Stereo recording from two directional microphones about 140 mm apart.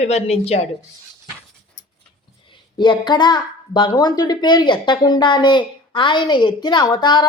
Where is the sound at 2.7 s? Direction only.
35° left (ahead or behind).